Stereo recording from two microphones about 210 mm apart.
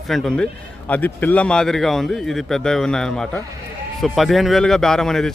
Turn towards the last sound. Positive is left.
turn(degrees=0)  # may be behind; listen again after turning